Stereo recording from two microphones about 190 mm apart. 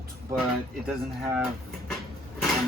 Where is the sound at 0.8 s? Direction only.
5° right (ahead or behind).